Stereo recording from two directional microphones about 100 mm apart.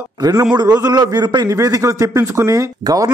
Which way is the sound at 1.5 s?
35° right (ahead or behind).